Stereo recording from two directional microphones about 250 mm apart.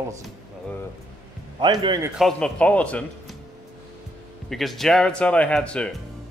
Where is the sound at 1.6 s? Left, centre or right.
Centre.